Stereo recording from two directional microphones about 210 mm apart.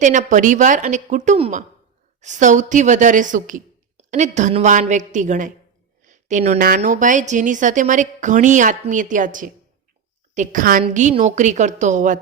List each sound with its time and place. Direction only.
0.0 s speech: 35° right (ahead or behind)
6.1 s a sound: 35° right (ahead or behind)
6.7 s speech: 35° right (ahead or behind)